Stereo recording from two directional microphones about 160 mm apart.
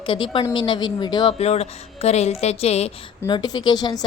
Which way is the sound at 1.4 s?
40° left (ahead or behind).